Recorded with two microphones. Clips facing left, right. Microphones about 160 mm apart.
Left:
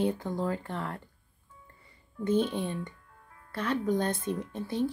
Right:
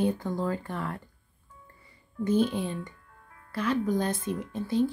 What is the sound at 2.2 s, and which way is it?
Speech, 25° left (ahead or behind).